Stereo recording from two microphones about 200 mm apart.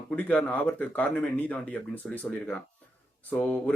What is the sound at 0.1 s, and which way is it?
Speech, 5° left (ahead or behind).